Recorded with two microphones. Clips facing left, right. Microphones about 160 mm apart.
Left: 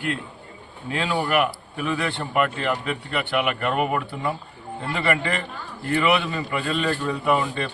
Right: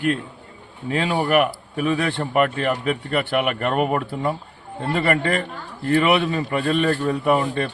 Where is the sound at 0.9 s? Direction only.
45° right (ahead or behind).